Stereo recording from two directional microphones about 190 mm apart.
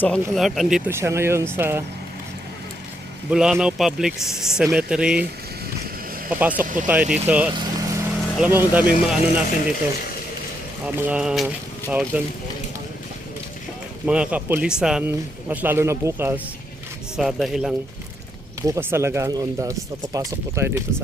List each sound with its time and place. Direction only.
0.0 s speech: centre (ahead or behind)
0.9 s speech: 15° right (ahead or behind)
3.2 s speech: 5° right (ahead or behind)
6.8 s speech: 10° right (ahead or behind)
7.6 s vehicle: 15° right (ahead or behind)
8.4 s speech: 10° right (ahead or behind)
10.8 s speech: 10° right (ahead or behind)
14.1 s speech: 5° right (ahead or behind)
17.2 s speech: centre (ahead or behind)
18.6 s speech: 15° right (ahead or behind)